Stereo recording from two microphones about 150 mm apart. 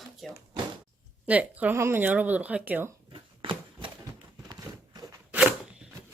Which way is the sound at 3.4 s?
35° right (ahead or behind).